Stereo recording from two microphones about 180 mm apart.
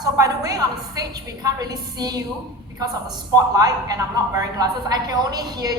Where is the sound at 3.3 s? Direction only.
20° right (ahead or behind).